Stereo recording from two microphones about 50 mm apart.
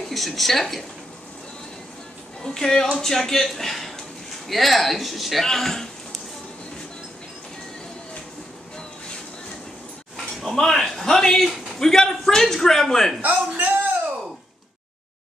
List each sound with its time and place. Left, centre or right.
0.1 s speech: centre
2.4 s speech: centre
10.1 s a man's voice: centre
13.2 s a man's voice: right